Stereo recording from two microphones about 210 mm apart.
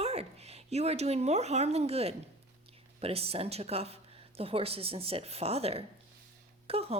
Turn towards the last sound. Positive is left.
turn(degrees=-30)  # may be behind; listen again after turning